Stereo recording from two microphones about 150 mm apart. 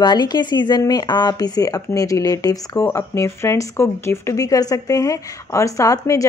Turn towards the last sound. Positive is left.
turn(degrees=20)  # may be behind; listen again after turning